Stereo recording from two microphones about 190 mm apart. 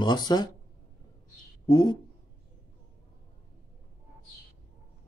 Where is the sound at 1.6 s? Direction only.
25° left (ahead or behind).